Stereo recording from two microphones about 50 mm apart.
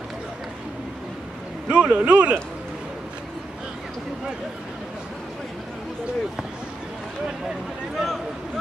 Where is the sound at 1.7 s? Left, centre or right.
Right.